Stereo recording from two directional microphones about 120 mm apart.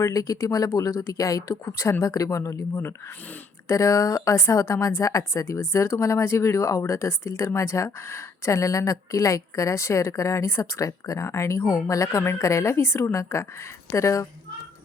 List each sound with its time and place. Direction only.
0.0 s a woman's voice: 30° left (ahead or behind)